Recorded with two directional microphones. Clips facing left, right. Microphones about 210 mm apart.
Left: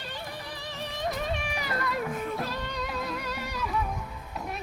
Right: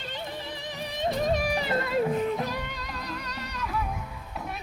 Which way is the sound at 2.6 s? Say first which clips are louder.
Left 4 dB; centre (ahead or behind).